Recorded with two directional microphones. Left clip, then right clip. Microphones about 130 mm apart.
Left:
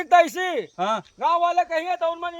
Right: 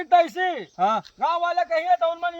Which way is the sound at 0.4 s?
85° left.